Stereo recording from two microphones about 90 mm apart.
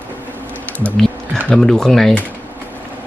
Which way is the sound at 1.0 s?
5° left (ahead or behind).